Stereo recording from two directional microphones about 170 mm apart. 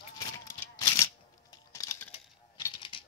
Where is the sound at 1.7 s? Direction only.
20° left (ahead or behind).